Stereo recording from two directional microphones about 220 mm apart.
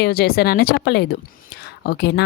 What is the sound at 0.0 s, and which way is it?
Speech, 45° left (ahead or behind).